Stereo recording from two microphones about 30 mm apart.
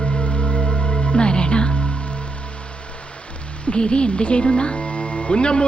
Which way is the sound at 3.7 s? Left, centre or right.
Left.